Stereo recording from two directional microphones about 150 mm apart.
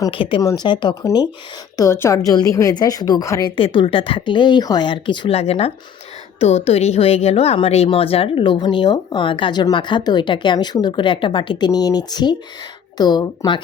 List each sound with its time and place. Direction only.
0.1 s a woman's voice: 35° left (ahead or behind)
3.5 s a woman's voice: 35° left (ahead or behind)